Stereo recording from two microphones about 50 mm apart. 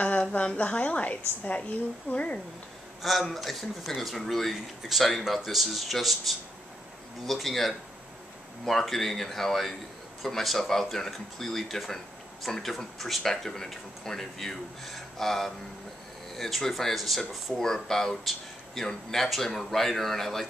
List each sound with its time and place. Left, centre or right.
0.0 s a woman's voice: left
3.0 s speech: centre